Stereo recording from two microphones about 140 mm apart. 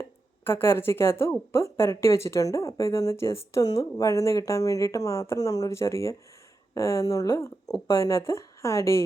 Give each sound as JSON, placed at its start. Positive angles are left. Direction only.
{"t": 0.4, "sound": "a woman's voice", "side_deg": 15}